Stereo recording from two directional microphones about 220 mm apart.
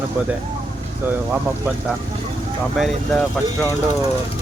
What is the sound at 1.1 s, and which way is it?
Speech, 5° right (ahead or behind).